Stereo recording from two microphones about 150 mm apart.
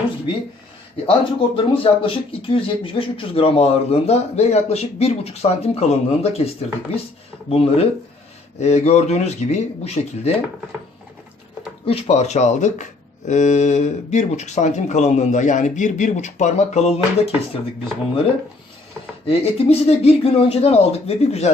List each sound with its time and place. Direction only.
1.0 s speech: 35° left (ahead or behind)
11.9 s speech: 45° left (ahead or behind)
19.3 s speech: 40° left (ahead or behind)